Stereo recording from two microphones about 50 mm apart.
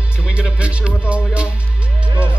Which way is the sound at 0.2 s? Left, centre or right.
Right.